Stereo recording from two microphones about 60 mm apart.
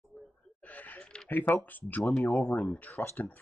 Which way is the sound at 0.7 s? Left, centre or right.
Left.